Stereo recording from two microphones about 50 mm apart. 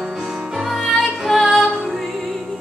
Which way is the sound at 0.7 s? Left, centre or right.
Centre.